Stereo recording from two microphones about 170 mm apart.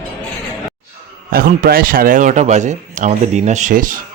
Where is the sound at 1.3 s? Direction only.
60° right (ahead or behind).